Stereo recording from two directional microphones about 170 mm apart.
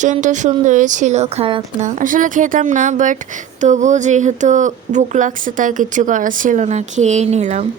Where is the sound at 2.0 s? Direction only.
50° right (ahead or behind).